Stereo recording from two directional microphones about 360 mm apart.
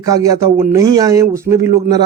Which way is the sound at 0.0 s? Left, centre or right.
Centre.